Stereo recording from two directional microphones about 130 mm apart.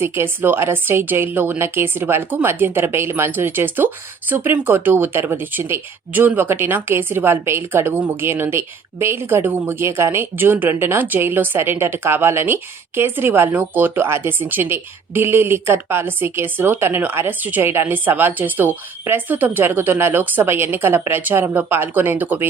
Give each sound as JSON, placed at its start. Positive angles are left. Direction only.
{"t": 0.0, "sound": "speech", "side_deg": -20}